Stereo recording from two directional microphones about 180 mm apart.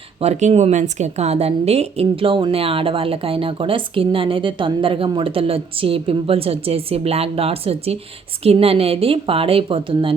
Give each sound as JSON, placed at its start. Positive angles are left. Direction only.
{"t": 0.2, "sound": "speech", "side_deg": -40}